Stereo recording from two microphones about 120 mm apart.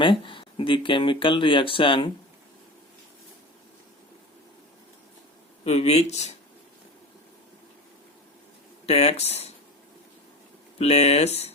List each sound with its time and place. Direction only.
0.0 s speech: 45° left (ahead or behind)
5.6 s speech: 60° left (ahead or behind)
8.9 s speech: 60° left (ahead or behind)
10.8 s speech: 60° left (ahead or behind)